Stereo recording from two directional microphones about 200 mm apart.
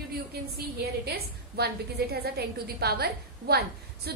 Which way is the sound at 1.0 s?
55° right (ahead or behind).